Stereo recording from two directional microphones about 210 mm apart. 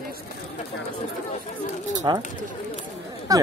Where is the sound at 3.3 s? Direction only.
15° right (ahead or behind).